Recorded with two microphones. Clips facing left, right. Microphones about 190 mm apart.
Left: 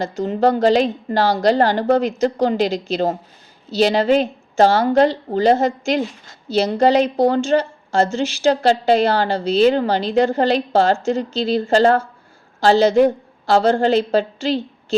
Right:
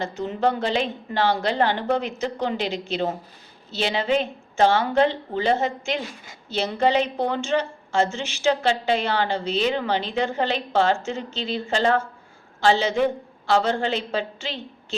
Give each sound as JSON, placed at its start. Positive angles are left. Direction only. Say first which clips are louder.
{"t": 0.0, "sound": "a woman's voice", "louder": "left 6 dB", "side_deg": 40}